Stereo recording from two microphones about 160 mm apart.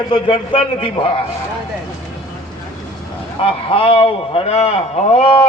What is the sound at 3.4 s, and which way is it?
A man's voice, 35° left (ahead or behind).